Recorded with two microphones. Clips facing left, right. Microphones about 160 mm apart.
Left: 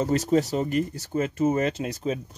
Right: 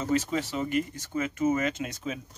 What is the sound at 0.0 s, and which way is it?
Speech, 40° left (ahead or behind).